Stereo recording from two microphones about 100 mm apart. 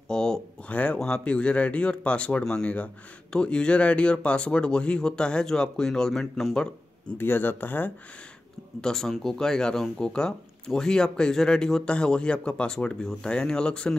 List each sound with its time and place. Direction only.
0.1 s speech: 5° left (ahead or behind)
7.2 s speech: 20° left (ahead or behind)
8.8 s speech: 5° left (ahead or behind)